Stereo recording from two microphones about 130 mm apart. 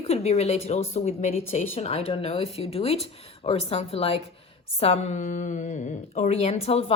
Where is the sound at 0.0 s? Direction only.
55° left (ahead or behind).